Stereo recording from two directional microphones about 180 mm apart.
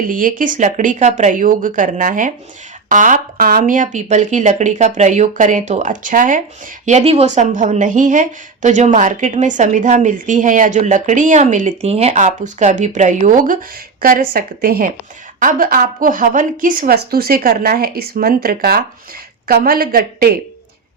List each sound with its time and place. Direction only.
0.1 s a woman's voice: 50° right (ahead or behind)